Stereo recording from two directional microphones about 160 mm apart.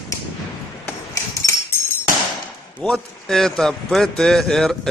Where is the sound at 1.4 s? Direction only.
20° left (ahead or behind).